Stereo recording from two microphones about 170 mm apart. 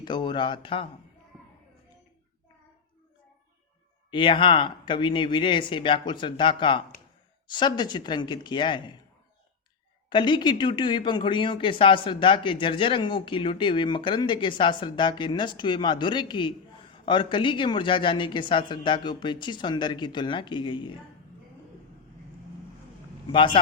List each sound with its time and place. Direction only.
0.0 s speech: 25° left (ahead or behind)
4.1 s speech: 30° left (ahead or behind)
10.1 s speech: 30° left (ahead or behind)
23.3 s speech: 25° left (ahead or behind)